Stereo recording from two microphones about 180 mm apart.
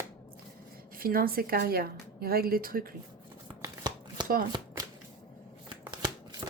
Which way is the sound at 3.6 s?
25° right (ahead or behind).